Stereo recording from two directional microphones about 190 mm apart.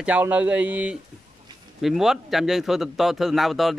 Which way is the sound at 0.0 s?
10° right (ahead or behind).